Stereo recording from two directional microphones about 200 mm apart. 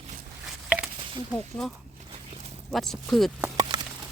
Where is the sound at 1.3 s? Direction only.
Centre (ahead or behind).